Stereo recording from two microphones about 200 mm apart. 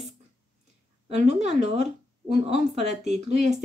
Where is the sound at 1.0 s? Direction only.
35° right (ahead or behind).